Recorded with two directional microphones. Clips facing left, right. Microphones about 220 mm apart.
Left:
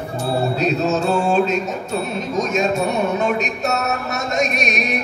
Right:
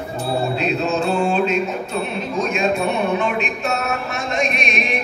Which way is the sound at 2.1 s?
40° left (ahead or behind).